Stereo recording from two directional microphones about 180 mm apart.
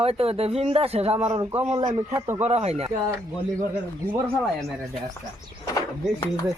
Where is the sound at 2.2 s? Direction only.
20° right (ahead or behind).